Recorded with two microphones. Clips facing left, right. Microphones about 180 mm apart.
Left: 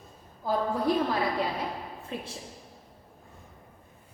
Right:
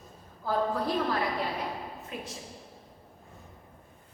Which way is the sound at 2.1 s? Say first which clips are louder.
Left 4 dB; 30° left (ahead or behind).